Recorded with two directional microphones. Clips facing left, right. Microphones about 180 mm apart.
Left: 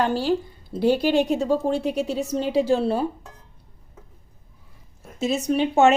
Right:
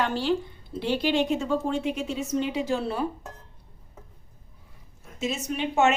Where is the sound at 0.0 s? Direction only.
35° left (ahead or behind).